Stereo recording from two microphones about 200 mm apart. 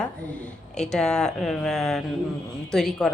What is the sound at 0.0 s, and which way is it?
A woman's voice, 5° left (ahead or behind).